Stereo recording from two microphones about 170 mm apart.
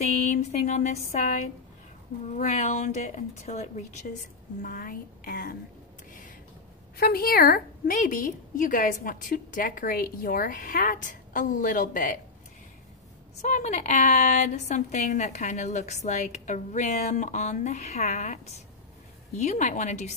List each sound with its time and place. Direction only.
0.3 s a woman's voice: 40° left (ahead or behind)
4.6 s a woman's voice: 60° left (ahead or behind)
7.0 s a woman's voice: 60° left (ahead or behind)
13.4 s a woman's voice: 45° left (ahead or behind)